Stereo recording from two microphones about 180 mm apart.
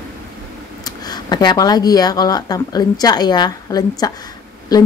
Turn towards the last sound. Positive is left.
turn(degrees=20)  # may be behind; listen again after turning